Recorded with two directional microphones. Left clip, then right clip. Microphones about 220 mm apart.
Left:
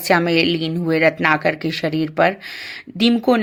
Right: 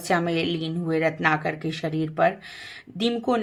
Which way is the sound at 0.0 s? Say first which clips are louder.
Left 8 dB; 25° left (ahead or behind).